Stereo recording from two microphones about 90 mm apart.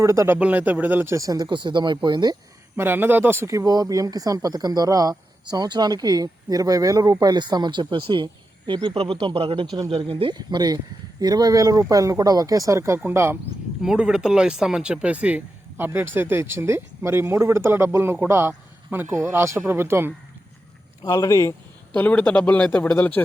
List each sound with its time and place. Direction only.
0.0 s speech: 35° right (ahead or behind)
0.3 s speech: 15° right (ahead or behind)
1.1 s speech: 40° right (ahead or behind)
2.7 s speech: 25° right (ahead or behind); by 8.9 s 60° right (ahead or behind)
9.0 s speech: 70° right (ahead or behind)
10.3 s speech: 50° right (ahead or behind); by 13.4 s 30° right (ahead or behind)
13.8 s speech: 10° right (ahead or behind); by 20.1 s 25° right (ahead or behind)
21.0 s speech: 40° left (ahead or behind)
21.9 s speech: 15° left (ahead or behind)